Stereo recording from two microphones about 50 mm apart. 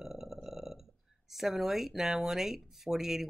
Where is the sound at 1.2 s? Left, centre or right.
Centre.